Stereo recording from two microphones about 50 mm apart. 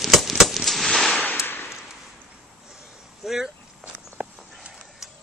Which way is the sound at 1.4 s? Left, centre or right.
Left.